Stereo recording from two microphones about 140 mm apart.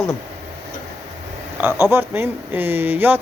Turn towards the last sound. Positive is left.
turn(degrees=-15)  # may be behind; listen again after turning